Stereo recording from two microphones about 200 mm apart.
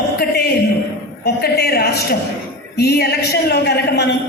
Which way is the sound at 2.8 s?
50° left (ahead or behind).